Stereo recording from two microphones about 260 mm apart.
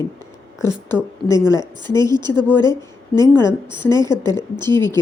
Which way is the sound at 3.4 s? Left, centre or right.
Centre.